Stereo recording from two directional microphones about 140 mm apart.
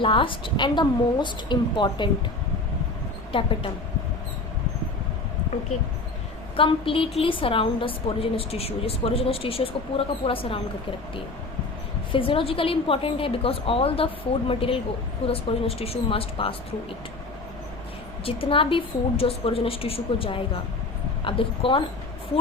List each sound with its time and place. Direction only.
0.0 s a woman's voice: 40° left (ahead or behind)
3.3 s a woman's voice: 40° left (ahead or behind)
6.6 s a woman's voice: 40° left (ahead or behind)
12.1 s a woman's voice: 40° left (ahead or behind)
18.3 s a woman's voice: 40° left (ahead or behind)